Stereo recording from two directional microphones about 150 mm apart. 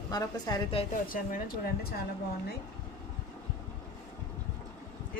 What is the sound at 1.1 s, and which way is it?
Speech, 65° left (ahead or behind).